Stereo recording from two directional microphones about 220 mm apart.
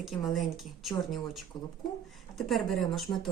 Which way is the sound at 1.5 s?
20° left (ahead or behind).